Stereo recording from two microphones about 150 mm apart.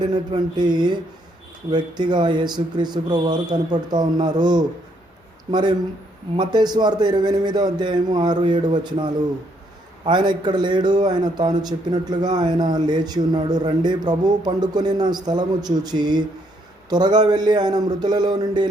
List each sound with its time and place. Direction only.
0.0 s a man's voice: 30° right (ahead or behind)